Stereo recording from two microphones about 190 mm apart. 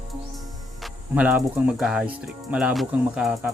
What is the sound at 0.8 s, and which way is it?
Speech, 5° right (ahead or behind).